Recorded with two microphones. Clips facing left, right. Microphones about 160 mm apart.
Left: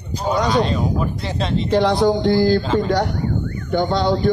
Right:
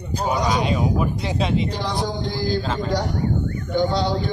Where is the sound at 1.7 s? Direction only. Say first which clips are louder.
Left 10 dB; 65° left (ahead or behind).